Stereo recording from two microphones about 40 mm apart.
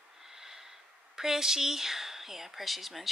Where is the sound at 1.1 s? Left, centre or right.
Centre.